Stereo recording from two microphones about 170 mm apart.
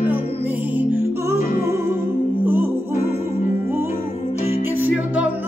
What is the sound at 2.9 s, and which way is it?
Music, 45° left (ahead or behind).